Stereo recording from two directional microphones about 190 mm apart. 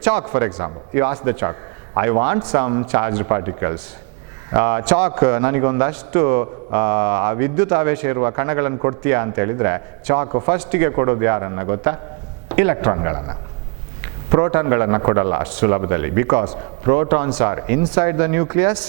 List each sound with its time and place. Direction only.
0.0 s a man's voice: 10° right (ahead or behind)